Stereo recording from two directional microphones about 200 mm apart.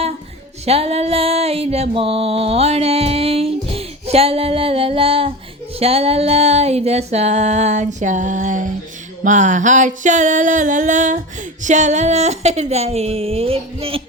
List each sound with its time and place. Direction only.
0.6 s music: 30° right (ahead or behind)